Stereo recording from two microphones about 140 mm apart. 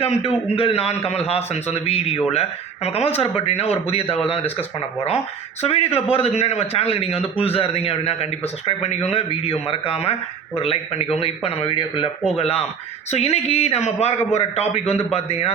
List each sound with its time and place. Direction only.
0.0 s a man's voice: 45° left (ahead or behind)
5.6 s a man's voice: 45° left (ahead or behind)